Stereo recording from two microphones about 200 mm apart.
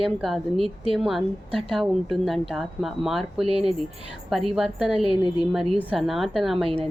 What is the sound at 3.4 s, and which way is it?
Speech, 30° right (ahead or behind).